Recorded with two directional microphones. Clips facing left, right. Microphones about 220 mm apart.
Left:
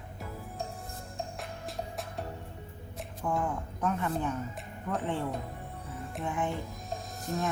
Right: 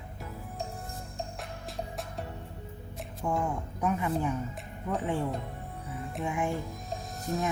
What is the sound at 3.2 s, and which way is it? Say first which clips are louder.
Speech: right 1 dB; 5° right (ahead or behind).